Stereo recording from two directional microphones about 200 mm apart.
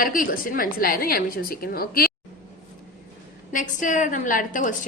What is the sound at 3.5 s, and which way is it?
A woman's voice, 40° left (ahead or behind).